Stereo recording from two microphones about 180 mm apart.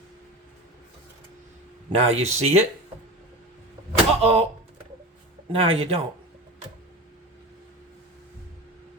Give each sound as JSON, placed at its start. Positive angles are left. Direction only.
{"t": 2.0, "sound": "speech", "side_deg": -35}
{"t": 3.9, "sound": "a sound", "side_deg": -35}
{"t": 5.5, "sound": "speech", "side_deg": -35}